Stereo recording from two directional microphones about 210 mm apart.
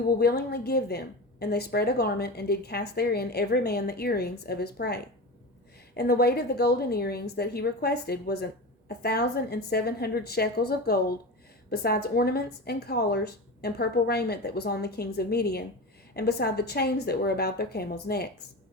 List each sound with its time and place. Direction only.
0.2 s a woman's voice: 50° left (ahead or behind)
6.0 s a woman's voice: 50° left (ahead or behind)